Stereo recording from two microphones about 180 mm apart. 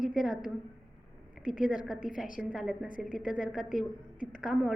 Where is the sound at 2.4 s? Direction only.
5° right (ahead or behind).